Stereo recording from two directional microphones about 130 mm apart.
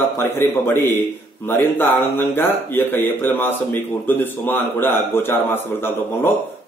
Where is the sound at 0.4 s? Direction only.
15° left (ahead or behind).